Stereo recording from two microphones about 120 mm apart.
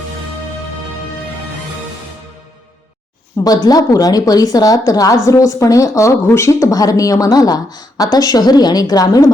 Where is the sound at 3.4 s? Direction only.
30° left (ahead or behind).